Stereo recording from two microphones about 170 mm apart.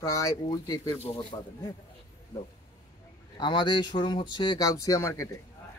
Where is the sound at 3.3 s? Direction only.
25° left (ahead or behind).